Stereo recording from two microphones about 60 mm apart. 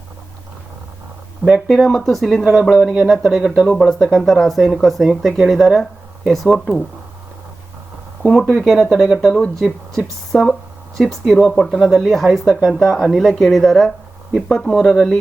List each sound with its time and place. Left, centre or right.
1.5 s speech: centre
1.7 s speech: centre
2.4 s speech: centre
3.7 s speech: centre
8.2 s speech: centre